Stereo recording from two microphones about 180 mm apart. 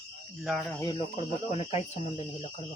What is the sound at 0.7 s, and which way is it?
Speech, 20° left (ahead or behind).